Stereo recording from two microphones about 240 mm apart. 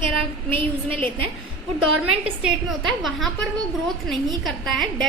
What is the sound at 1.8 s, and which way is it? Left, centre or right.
Speech, right.